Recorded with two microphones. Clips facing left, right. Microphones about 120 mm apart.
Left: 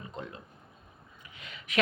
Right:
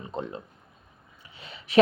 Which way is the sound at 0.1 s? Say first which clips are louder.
Right 7 dB; 30° right (ahead or behind).